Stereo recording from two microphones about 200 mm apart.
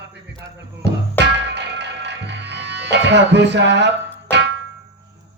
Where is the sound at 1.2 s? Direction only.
60° right (ahead or behind).